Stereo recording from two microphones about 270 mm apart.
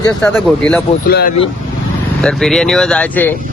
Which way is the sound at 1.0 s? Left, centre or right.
Left.